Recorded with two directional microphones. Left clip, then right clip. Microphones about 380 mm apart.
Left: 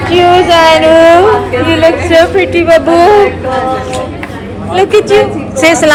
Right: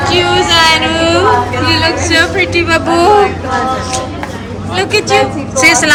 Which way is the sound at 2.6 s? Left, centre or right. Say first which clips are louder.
Left 6 dB; centre.